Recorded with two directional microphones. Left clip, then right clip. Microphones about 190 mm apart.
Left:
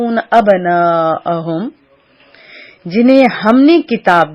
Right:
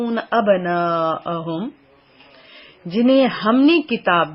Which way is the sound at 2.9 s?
25° left (ahead or behind).